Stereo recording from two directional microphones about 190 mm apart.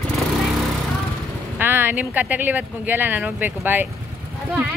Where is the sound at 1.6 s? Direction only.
10° right (ahead or behind).